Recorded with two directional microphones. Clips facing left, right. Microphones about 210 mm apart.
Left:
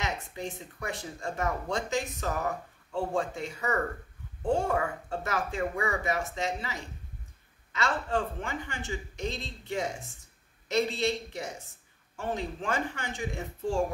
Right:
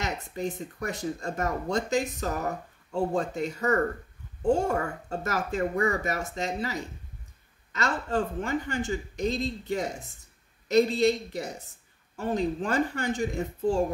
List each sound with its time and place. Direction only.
0.0 s speech: 40° right (ahead or behind)